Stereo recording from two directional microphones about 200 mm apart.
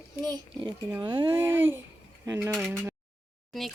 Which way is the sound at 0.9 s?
20° right (ahead or behind).